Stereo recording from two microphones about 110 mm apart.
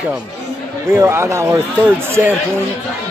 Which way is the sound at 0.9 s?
25° right (ahead or behind).